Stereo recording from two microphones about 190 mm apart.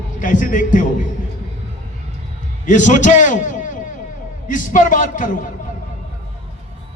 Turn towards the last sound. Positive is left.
turn(degrees=45)  # may be behind; listen again after turning